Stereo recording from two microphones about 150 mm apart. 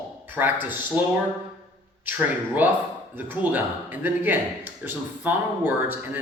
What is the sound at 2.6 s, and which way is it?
A man's voice, 10° right (ahead or behind).